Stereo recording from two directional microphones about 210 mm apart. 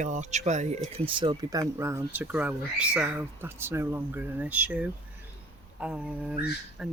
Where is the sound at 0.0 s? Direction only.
35° right (ahead or behind).